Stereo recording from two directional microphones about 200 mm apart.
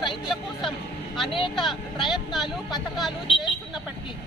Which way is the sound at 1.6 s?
Centre (ahead or behind).